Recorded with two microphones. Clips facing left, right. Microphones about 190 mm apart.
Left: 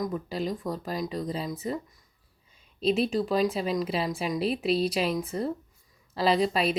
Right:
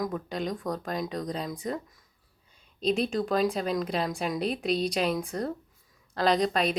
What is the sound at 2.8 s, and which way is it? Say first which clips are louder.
A woman's voice: left 2 dB; 5° left (ahead or behind).